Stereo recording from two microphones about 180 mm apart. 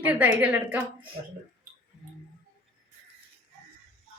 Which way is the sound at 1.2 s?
55° right (ahead or behind).